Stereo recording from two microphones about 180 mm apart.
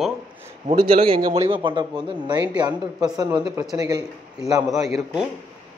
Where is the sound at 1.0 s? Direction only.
30° right (ahead or behind).